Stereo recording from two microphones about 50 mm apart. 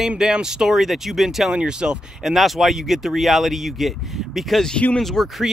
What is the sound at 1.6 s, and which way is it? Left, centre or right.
Speech, centre.